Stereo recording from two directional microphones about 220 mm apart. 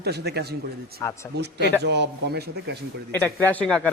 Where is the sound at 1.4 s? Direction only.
50° right (ahead or behind).